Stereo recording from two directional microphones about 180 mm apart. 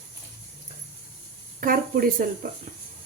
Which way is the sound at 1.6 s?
50° right (ahead or behind).